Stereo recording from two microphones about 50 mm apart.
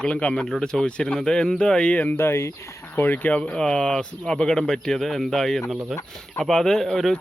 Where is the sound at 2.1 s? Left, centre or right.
Left.